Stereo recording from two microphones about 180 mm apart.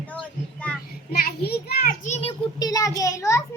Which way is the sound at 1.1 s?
60° left (ahead or behind).